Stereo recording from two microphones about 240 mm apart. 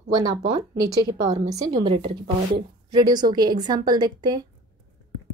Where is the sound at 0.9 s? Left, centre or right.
Centre.